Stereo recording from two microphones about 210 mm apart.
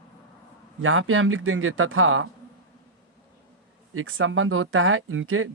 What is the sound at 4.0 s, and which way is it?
Speech, 75° right (ahead or behind).